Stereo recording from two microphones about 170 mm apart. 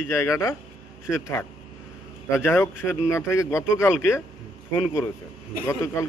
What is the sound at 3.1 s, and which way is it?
Speech, 15° left (ahead or behind).